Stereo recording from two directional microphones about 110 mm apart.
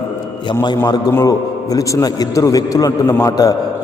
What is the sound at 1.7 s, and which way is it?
A man's voice, 35° left (ahead or behind).